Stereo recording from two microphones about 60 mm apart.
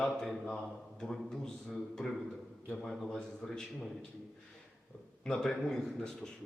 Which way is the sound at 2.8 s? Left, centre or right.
Centre.